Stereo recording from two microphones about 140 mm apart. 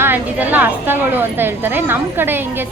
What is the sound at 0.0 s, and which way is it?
A woman's voice, 15° right (ahead or behind).